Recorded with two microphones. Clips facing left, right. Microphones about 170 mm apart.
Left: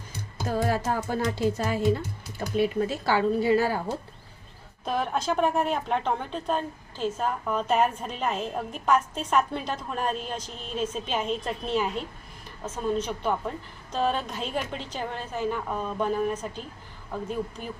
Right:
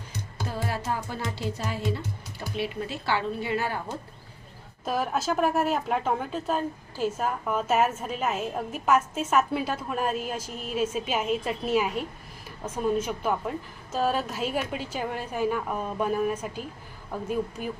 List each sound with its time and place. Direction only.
0.4 s music: 45° left (ahead or behind)
2.6 s speech: 45° left (ahead or behind)
4.9 s a woman's voice: 5° right (ahead or behind)